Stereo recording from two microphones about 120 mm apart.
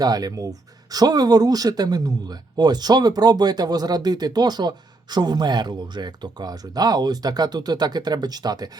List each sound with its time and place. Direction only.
0.0 s speech: 30° right (ahead or behind)